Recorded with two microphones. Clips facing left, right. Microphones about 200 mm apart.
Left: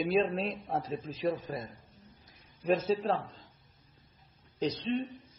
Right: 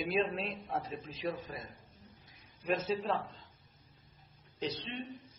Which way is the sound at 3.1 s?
35° left (ahead or behind).